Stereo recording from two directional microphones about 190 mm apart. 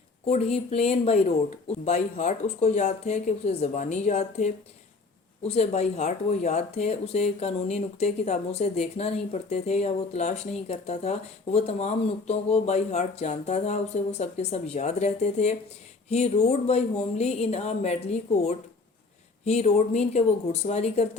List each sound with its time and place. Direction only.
0.3 s speech: 35° left (ahead or behind)
19.5 s speech: 35° left (ahead or behind)